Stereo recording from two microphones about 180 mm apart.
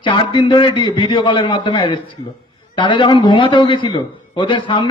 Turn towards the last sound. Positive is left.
turn(degrees=30)  # may be behind; listen again after turning